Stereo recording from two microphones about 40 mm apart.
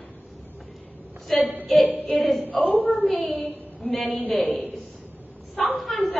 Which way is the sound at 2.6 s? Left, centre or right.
Left.